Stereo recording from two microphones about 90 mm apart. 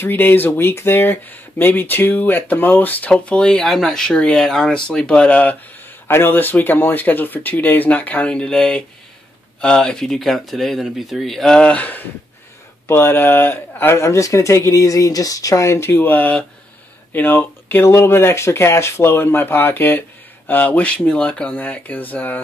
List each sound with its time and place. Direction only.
0.0 s speech: 25° left (ahead or behind)
12.8 s speech: 25° left (ahead or behind)